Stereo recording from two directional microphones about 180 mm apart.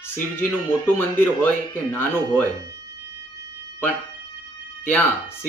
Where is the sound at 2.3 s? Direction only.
20° right (ahead or behind).